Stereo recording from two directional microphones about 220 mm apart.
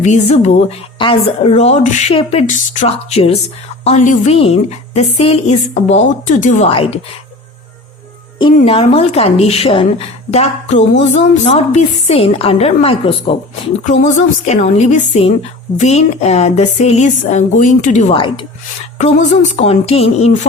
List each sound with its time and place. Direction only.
0.0 s a woman's voice: 30° left (ahead or behind)
8.5 s a woman's voice: 25° left (ahead or behind)